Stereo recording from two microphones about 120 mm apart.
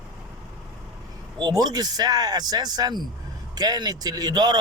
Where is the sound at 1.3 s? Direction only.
35° right (ahead or behind).